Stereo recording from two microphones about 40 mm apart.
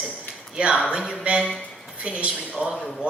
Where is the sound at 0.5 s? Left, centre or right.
Right.